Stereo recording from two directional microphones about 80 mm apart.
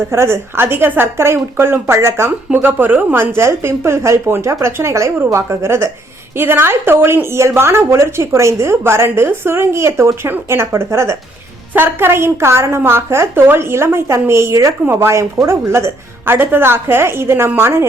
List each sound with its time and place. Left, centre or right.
0.1 s a woman's voice: right
2.5 s a woman's voice: right